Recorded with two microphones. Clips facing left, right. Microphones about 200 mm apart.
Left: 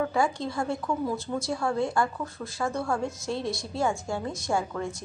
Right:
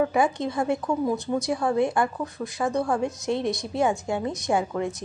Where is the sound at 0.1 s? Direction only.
20° right (ahead or behind).